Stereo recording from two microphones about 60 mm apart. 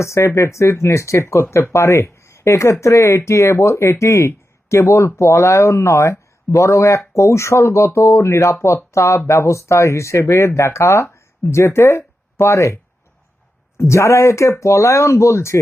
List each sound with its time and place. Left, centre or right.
0.0 s speech: left